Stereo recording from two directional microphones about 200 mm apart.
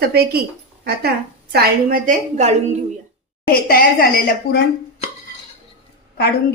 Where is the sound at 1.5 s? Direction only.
45° right (ahead or behind).